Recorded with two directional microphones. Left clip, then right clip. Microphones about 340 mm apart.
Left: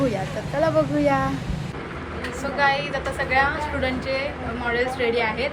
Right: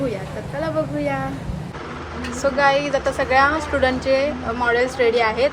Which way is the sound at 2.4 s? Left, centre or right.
Centre.